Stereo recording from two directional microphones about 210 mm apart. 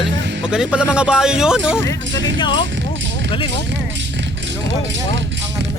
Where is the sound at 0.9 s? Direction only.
5° right (ahead or behind).